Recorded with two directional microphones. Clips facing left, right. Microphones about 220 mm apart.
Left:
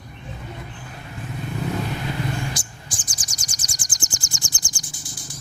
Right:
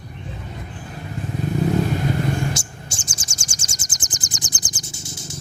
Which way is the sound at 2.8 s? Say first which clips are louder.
Right 3 dB; 25° right (ahead or behind).